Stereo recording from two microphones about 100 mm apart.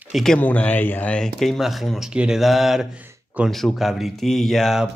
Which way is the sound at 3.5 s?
Centre (ahead or behind).